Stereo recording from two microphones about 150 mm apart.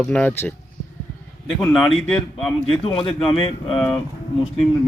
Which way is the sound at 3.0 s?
35° left (ahead or behind).